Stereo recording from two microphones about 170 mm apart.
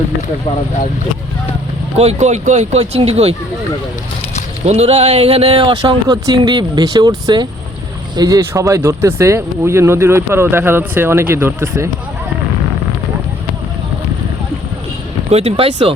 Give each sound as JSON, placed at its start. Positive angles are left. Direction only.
{"t": 2.0, "sound": "speech", "side_deg": -40}
{"t": 4.6, "sound": "speech", "side_deg": -40}
{"t": 8.1, "sound": "speech", "side_deg": -20}
{"t": 15.3, "sound": "speech", "side_deg": -35}